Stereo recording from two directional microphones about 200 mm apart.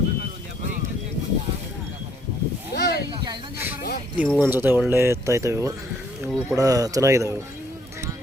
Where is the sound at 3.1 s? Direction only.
20° right (ahead or behind).